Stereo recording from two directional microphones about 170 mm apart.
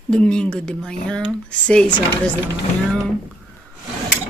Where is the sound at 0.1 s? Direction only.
5° left (ahead or behind).